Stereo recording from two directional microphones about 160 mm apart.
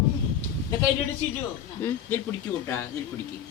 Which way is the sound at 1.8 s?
10° left (ahead or behind).